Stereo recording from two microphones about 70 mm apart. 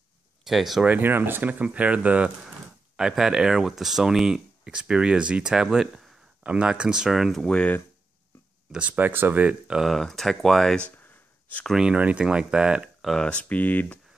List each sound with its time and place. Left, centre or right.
0.5 s speech: centre
0.8 s speech: right; by 6.2 s centre
6.4 s speech: centre
7.4 s speech: centre
8.9 s speech: right
9.8 s speech: centre
11.0 s a sound: left
11.7 s speech: centre
13.0 s speech: centre